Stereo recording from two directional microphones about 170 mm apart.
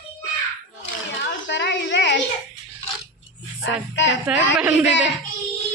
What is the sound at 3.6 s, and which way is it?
Speech, 90° left.